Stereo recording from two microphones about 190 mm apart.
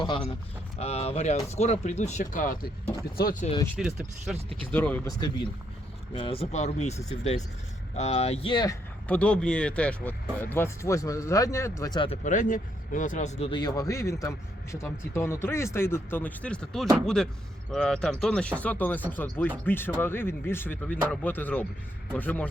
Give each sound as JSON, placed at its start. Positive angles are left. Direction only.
{"t": 0.8, "sound": "speech", "side_deg": 35}
{"t": 3.8, "sound": "speech", "side_deg": -5}
{"t": 4.6, "sound": "a man's voice", "side_deg": 10}
{"t": 6.1, "sound": "speech", "side_deg": 30}
{"t": 9.0, "sound": "a man's voice", "side_deg": 5}
{"t": 12.2, "sound": "a man's voice", "side_deg": 40}